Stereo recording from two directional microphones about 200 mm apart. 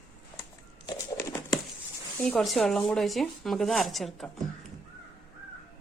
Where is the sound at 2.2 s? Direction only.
Centre (ahead or behind).